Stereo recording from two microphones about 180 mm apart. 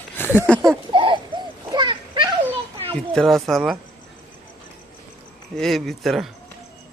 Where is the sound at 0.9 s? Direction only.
25° right (ahead or behind).